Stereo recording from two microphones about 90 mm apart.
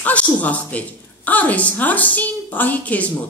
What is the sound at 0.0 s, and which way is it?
A woman's voice, 15° left (ahead or behind).